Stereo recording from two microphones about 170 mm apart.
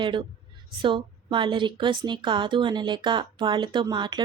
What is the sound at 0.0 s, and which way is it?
A woman's voice, 30° right (ahead or behind).